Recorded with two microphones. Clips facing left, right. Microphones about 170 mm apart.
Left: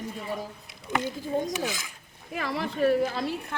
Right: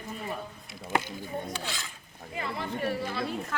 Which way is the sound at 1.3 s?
90° left.